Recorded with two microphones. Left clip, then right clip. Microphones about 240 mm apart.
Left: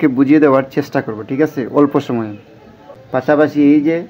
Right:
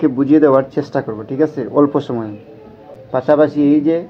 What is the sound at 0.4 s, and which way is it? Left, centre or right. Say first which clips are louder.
Speech: even; left.